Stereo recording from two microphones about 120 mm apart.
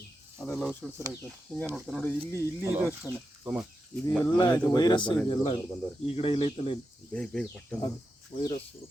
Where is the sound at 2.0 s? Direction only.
20° left (ahead or behind).